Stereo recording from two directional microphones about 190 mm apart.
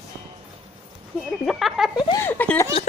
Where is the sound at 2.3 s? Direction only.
10° left (ahead or behind).